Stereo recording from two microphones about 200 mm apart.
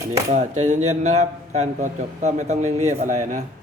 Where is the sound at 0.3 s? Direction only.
35° right (ahead or behind).